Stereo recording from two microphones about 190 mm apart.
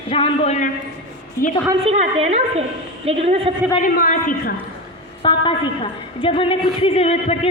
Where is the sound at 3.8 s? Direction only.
45° left (ahead or behind).